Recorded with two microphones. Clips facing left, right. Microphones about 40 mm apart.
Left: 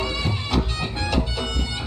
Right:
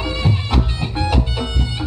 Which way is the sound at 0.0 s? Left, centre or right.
Centre.